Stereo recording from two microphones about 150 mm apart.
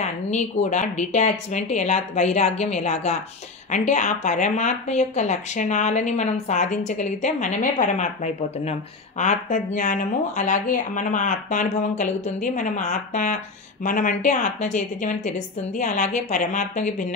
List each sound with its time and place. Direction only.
0.0 s speech: 50° left (ahead or behind)